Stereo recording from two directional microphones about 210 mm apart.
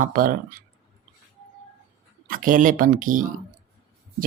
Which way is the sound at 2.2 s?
40° right (ahead or behind).